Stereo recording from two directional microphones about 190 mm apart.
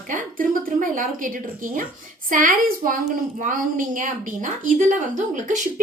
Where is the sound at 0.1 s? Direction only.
45° right (ahead or behind).